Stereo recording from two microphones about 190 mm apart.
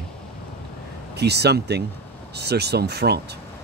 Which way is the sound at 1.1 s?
60° right (ahead or behind).